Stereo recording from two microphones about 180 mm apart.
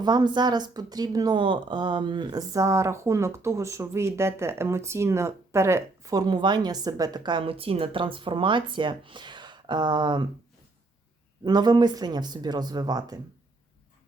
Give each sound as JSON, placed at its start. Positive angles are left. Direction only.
{"t": 0.0, "sound": "speech", "side_deg": -25}
{"t": 11.4, "sound": "speech", "side_deg": -25}